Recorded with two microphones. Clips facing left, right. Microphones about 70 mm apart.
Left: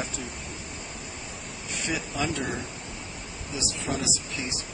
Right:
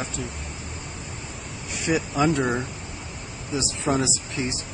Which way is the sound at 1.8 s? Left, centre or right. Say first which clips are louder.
Right 8 dB; centre.